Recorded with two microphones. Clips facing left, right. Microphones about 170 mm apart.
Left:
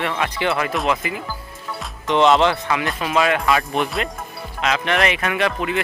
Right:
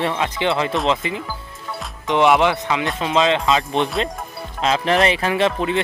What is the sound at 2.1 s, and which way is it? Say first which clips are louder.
Speech: even; 15° right (ahead or behind).